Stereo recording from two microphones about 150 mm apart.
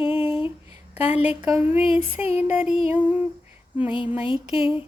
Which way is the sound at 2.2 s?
45° left (ahead or behind).